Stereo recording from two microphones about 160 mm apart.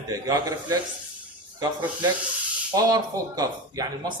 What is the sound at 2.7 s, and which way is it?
Speech, 25° right (ahead or behind).